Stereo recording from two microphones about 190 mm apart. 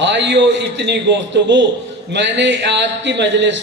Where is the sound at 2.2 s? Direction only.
70° right (ahead or behind).